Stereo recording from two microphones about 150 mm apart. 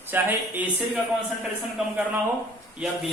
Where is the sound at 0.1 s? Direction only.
10° right (ahead or behind).